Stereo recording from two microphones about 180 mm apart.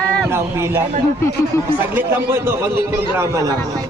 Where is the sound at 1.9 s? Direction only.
10° right (ahead or behind).